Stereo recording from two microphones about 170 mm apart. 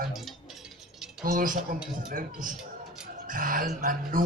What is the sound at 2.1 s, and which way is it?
Speech, 55° right (ahead or behind).